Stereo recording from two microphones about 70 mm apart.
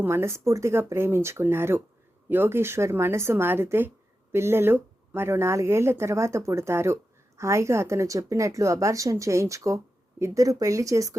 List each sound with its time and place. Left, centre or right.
0.0 s speech: right
10.4 s speech: right